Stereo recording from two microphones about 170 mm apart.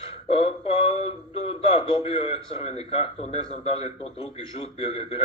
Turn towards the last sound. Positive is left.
turn(degrees=35)  # may be behind; listen again after turning